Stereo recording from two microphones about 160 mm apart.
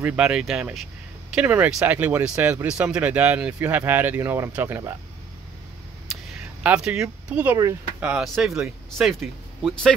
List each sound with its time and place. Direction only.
0.0 s speech: 5° right (ahead or behind)
6.1 s a sound: centre (ahead or behind)
6.6 s speech: 10° right (ahead or behind)